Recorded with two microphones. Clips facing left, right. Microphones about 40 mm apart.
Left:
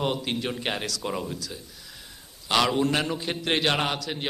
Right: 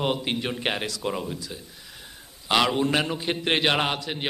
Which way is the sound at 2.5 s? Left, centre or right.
Centre.